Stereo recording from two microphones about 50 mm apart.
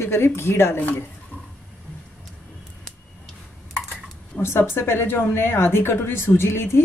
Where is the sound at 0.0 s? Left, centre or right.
Left.